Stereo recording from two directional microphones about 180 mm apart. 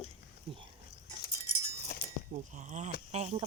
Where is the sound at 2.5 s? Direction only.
40° right (ahead or behind).